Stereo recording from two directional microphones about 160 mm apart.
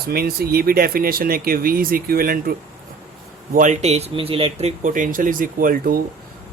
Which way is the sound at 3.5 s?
50° right (ahead or behind).